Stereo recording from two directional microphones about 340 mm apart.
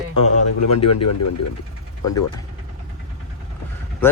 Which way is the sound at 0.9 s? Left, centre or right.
Left.